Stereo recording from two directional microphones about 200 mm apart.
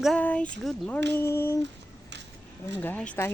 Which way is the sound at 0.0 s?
5° left (ahead or behind).